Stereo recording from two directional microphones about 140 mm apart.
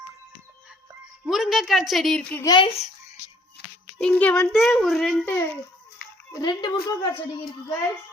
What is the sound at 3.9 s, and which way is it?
A woman's voice, 10° left (ahead or behind).